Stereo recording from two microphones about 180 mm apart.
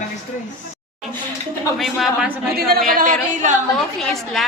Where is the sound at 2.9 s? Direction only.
50° right (ahead or behind).